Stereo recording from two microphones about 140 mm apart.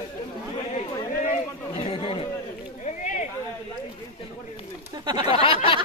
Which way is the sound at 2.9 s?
60° left (ahead or behind).